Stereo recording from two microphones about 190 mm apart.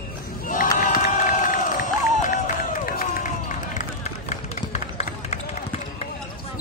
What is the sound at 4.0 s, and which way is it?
Run, 35° left (ahead or behind).